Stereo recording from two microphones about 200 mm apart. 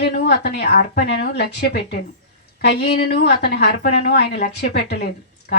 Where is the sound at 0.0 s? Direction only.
55° left (ahead or behind).